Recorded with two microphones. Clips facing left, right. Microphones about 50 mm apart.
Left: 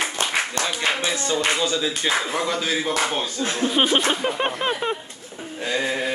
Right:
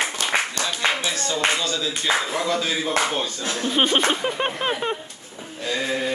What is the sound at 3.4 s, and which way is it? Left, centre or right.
Speech, left.